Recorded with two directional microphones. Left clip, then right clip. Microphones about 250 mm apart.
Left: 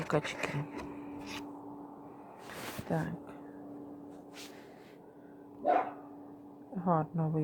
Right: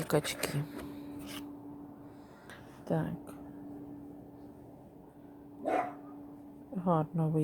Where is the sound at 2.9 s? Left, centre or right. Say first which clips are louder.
Right 3 dB; centre.